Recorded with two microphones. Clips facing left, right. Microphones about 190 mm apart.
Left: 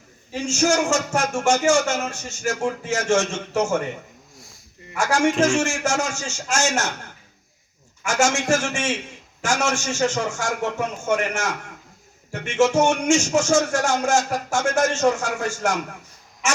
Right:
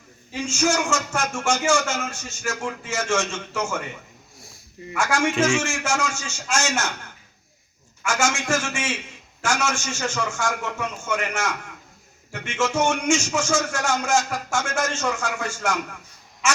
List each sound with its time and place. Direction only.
0.3 s speech: 45° left (ahead or behind)
4.9 s speech: 45° left (ahead or behind)
8.1 s speech: 45° left (ahead or behind)